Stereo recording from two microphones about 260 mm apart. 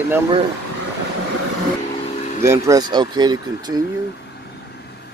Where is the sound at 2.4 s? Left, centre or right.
Centre.